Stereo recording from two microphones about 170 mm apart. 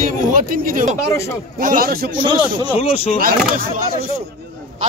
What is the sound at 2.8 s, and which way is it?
Speech, 35° left (ahead or behind).